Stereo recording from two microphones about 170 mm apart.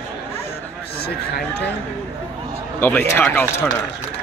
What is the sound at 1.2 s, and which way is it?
Speech, 75° left (ahead or behind).